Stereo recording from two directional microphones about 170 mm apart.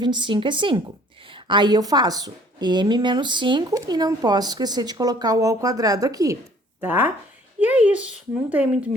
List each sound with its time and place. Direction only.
0.0 s a woman's voice: 25° right (ahead or behind); by 8.9 s 10° right (ahead or behind)